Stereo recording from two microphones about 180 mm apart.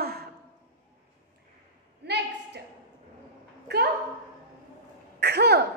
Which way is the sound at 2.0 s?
65° right (ahead or behind).